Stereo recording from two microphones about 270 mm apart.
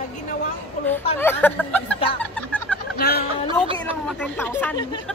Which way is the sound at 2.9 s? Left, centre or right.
Left.